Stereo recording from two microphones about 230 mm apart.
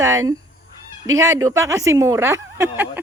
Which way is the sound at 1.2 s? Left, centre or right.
Centre.